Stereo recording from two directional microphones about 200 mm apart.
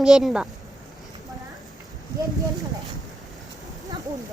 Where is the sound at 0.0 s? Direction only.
5° right (ahead or behind).